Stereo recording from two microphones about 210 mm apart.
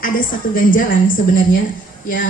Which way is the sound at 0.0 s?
40° left (ahead or behind).